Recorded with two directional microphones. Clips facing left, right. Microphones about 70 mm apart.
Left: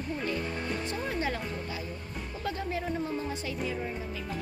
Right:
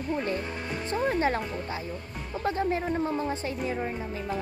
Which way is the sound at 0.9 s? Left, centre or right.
Right.